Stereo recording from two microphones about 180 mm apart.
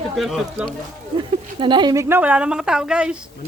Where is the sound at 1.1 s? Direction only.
25° right (ahead or behind); by 3.1 s 5° right (ahead or behind).